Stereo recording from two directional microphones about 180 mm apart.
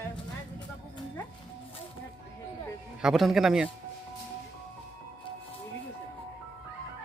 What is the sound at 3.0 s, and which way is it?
Speech, centre (ahead or behind).